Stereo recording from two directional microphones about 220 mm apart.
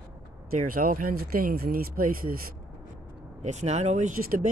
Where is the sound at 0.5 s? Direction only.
40° right (ahead or behind).